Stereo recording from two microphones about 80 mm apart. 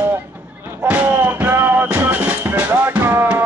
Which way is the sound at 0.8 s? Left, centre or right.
Right.